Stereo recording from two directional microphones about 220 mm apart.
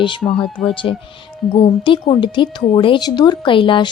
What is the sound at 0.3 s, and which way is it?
Speech, 5° left (ahead or behind).